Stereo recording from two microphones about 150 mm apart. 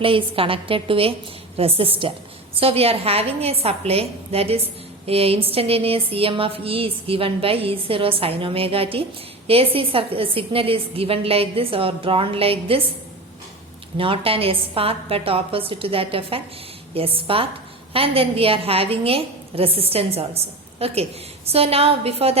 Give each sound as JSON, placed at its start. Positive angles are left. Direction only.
{"t": 0.0, "sound": "a woman's voice", "side_deg": -35}
{"t": 13.9, "sound": "a woman's voice", "side_deg": -35}